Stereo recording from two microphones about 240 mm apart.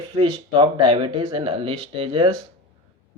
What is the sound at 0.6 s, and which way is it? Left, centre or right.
Speech, right.